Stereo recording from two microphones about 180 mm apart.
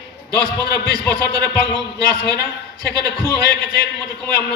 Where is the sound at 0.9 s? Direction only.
65° left (ahead or behind).